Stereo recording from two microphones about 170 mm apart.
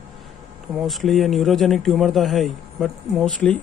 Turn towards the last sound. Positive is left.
turn(degrees=5)  # may be behind; listen again after turning